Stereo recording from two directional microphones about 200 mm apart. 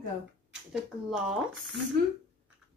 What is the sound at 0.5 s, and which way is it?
Speech, 5° right (ahead or behind).